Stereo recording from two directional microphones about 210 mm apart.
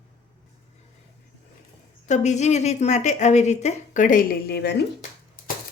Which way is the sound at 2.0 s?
35° left (ahead or behind).